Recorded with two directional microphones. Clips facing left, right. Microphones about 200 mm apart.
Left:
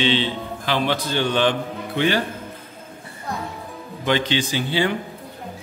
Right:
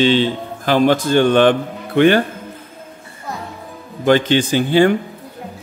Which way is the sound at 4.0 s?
50° right (ahead or behind).